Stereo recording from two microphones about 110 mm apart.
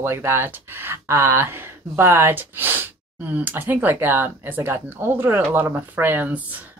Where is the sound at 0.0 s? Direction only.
20° right (ahead or behind).